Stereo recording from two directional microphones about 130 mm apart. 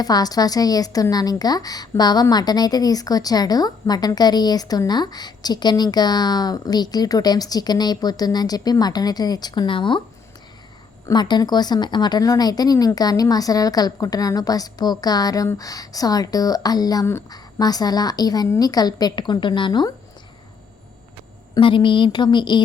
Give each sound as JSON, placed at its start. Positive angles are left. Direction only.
{"t": 0.0, "sound": "a woman's voice", "side_deg": 30}
{"t": 11.1, "sound": "a woman's voice", "side_deg": 35}
{"t": 21.5, "sound": "a woman's voice", "side_deg": 40}